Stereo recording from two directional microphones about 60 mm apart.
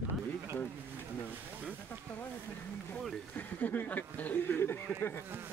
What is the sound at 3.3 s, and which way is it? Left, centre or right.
Speech, left.